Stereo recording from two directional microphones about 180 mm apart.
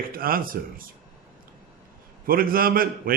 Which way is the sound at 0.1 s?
55° right (ahead or behind).